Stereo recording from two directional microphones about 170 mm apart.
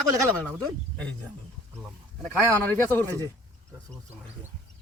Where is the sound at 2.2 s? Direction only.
10° left (ahead or behind).